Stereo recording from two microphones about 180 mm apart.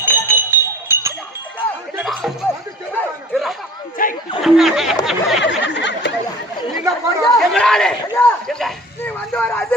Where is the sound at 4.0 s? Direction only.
50° left (ahead or behind).